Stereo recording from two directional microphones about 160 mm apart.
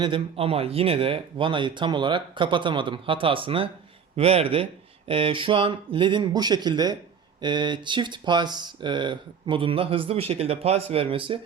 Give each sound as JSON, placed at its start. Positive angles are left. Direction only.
{"t": 0.0, "sound": "speech", "side_deg": -35}